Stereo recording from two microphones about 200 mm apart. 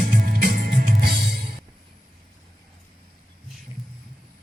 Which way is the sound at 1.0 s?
50° right (ahead or behind).